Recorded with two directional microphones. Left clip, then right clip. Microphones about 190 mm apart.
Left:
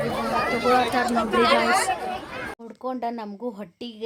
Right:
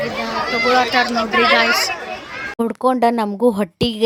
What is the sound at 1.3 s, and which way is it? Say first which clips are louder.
Speech: right 5 dB; 65° left (ahead or behind).